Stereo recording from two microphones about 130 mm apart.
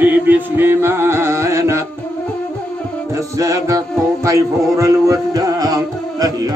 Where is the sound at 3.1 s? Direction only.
25° right (ahead or behind).